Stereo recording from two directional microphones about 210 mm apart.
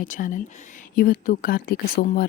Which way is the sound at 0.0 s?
40° left (ahead or behind).